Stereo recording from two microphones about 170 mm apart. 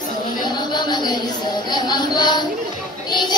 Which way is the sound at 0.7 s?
25° left (ahead or behind).